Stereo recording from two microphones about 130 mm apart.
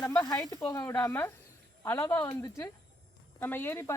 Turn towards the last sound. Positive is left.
turn(degrees=20)  # may be behind; listen again after turning